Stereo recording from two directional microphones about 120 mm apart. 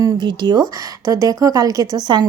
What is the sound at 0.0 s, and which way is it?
Speech, 35° right (ahead or behind).